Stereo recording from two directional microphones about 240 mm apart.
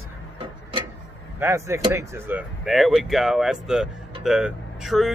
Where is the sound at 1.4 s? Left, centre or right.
Centre.